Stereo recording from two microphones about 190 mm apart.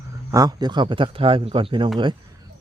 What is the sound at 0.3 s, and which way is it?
Speech, 20° right (ahead or behind).